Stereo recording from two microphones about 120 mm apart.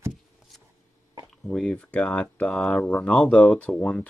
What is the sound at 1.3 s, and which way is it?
Speech, 5° left (ahead or behind).